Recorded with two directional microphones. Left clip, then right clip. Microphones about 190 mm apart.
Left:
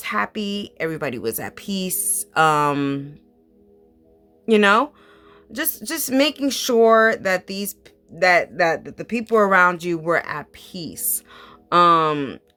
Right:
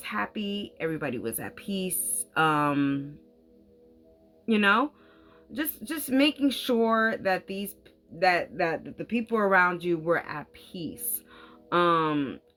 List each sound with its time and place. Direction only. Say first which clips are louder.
0.0 s speech: left 8 dB; 45° left (ahead or behind)
4.4 s speech: left 8 dB; 45° left (ahead or behind)